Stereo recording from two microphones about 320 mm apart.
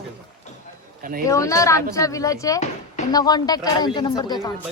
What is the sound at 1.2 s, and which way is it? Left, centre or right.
Speech, centre.